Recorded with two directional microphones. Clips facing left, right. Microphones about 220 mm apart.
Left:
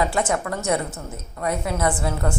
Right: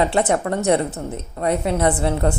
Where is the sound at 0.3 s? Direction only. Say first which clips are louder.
Right 5 dB; 25° right (ahead or behind).